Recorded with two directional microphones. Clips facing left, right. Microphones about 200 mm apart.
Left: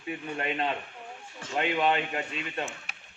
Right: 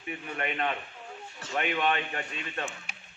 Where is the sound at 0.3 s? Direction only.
25° left (ahead or behind).